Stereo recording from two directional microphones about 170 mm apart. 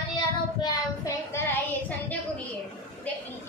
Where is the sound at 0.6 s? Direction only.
20° left (ahead or behind).